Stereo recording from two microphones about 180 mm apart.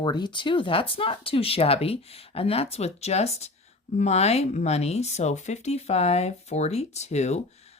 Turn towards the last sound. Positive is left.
turn(degrees=40)  # may be behind; listen again after turning